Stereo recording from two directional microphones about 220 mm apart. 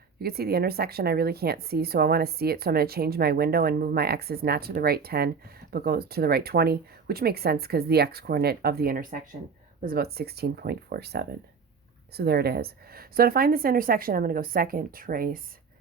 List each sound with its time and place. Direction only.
0.2 s a woman's voice: 45° right (ahead or behind)